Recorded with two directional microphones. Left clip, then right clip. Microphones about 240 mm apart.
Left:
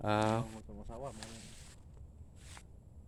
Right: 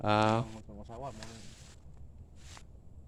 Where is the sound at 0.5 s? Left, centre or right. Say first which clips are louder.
Right 2 dB; right.